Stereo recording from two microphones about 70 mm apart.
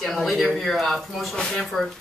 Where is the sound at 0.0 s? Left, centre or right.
Centre.